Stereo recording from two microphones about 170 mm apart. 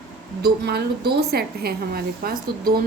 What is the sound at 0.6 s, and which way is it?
Speech, 75° right (ahead or behind).